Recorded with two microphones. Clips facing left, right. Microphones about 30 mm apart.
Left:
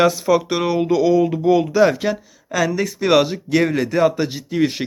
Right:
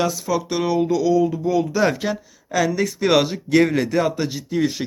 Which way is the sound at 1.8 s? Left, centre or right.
Centre.